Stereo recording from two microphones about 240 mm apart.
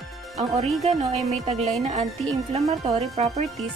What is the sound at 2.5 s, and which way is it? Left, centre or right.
Speech, right.